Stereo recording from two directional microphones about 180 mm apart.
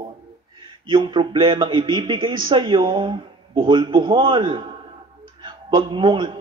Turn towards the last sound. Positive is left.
turn(degrees=-25)  # may be behind; listen again after turning